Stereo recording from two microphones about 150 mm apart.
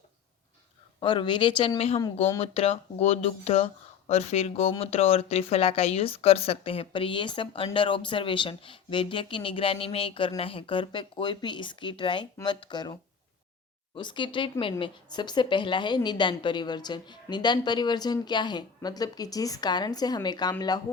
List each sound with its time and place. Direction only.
0.9 s a woman's voice: 30° left (ahead or behind)